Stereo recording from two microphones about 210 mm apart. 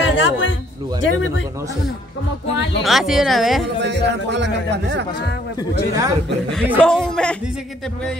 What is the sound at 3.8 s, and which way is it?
Speech, 55° right (ahead or behind).